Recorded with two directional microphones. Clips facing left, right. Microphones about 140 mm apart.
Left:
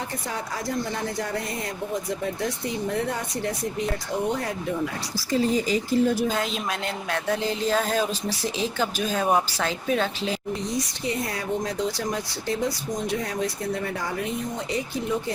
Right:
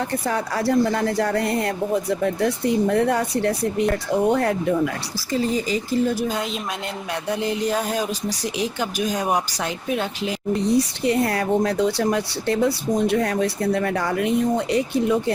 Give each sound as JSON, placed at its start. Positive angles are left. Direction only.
{"t": 0.3, "sound": "speech", "side_deg": -65}
{"t": 6.3, "sound": "a woman's voice", "side_deg": 0}
{"t": 7.1, "sound": "speech", "side_deg": -15}
{"t": 10.5, "sound": "speech", "side_deg": -65}